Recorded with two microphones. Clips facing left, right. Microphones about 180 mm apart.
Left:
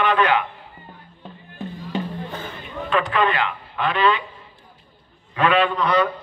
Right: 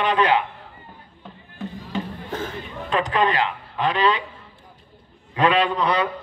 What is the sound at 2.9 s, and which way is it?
A man's voice, 35° right (ahead or behind).